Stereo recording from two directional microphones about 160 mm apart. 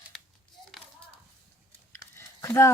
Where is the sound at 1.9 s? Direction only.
15° left (ahead or behind).